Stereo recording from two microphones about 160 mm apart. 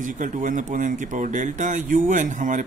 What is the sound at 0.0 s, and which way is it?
Speech, 55° right (ahead or behind).